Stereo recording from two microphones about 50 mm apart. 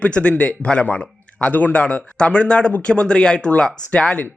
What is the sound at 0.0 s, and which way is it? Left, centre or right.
Speech, left.